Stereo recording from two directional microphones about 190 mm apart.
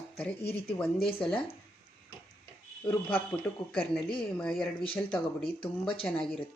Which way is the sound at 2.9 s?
10° left (ahead or behind).